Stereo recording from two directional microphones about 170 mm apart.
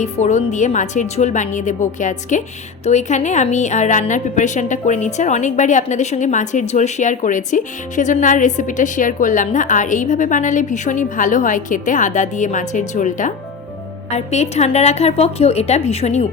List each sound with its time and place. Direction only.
0.0 s a woman's voice: 45° left (ahead or behind)